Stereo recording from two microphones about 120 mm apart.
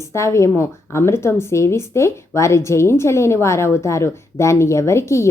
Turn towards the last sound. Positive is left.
turn(degrees=25)  # may be behind; listen again after turning